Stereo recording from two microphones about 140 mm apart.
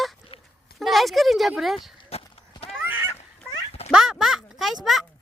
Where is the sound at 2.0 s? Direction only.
45° left (ahead or behind).